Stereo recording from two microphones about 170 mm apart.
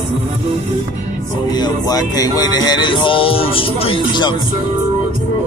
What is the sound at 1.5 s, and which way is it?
Music, 25° left (ahead or behind).